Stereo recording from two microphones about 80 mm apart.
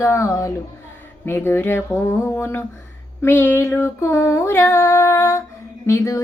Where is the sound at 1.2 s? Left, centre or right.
Left.